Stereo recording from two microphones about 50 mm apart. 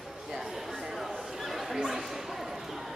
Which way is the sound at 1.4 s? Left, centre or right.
Centre.